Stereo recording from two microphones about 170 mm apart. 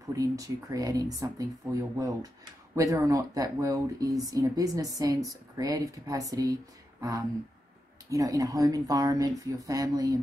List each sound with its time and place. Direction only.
0.1 s speech: 20° right (ahead or behind)
8.1 s speech: 20° right (ahead or behind)